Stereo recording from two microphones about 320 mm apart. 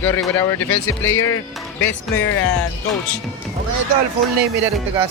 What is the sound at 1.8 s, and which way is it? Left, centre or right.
Speech, left.